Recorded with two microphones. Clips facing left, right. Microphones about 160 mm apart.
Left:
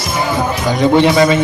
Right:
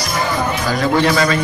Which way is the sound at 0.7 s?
20° left (ahead or behind).